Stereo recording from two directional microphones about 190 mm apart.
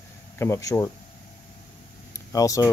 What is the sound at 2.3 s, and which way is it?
Speech, 20° left (ahead or behind).